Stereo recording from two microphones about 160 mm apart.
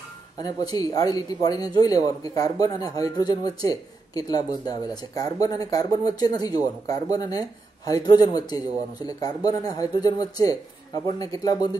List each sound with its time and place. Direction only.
0.4 s speech: 25° left (ahead or behind)